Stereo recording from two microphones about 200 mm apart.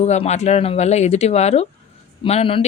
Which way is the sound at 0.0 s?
35° left (ahead or behind).